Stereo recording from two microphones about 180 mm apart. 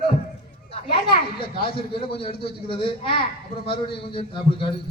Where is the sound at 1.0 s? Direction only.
30° left (ahead or behind).